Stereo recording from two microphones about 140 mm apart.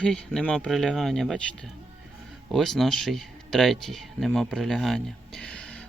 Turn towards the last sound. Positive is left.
turn(degrees=5)  # may be behind; listen again after turning